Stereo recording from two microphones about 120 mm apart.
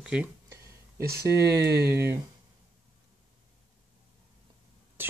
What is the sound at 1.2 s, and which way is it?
Speech, 20° right (ahead or behind).